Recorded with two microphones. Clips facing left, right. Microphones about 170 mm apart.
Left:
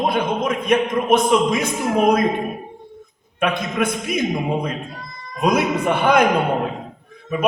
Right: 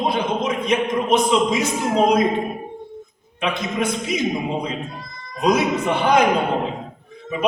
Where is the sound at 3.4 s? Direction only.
55° left (ahead or behind).